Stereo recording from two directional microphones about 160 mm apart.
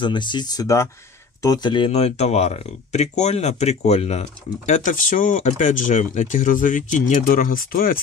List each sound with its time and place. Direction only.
0.0 s speech: 30° left (ahead or behind); by 8.0 s 65° left (ahead or behind)